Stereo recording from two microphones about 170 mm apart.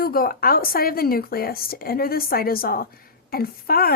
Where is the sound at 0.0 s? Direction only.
60° left (ahead or behind).